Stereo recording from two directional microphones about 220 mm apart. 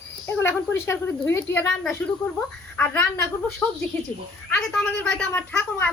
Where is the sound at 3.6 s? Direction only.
10° left (ahead or behind).